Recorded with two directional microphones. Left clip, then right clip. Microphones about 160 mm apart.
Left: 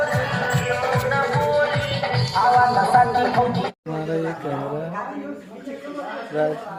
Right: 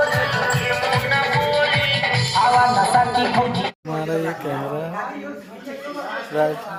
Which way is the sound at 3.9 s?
10° right (ahead or behind).